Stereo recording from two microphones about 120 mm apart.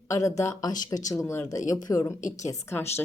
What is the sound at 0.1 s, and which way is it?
A woman's voice, 25° left (ahead or behind).